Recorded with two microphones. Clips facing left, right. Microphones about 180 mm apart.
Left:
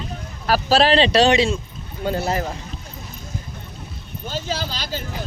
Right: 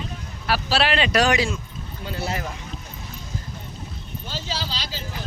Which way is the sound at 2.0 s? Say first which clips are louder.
Left 7 dB; 45° left (ahead or behind).